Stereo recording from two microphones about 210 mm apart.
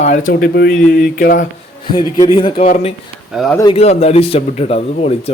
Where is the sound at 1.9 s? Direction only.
20° left (ahead or behind).